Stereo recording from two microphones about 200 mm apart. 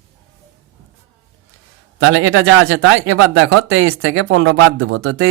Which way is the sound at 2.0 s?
75° right (ahead or behind).